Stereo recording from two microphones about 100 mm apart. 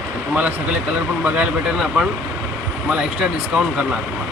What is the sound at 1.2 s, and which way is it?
Speech, 15° right (ahead or behind).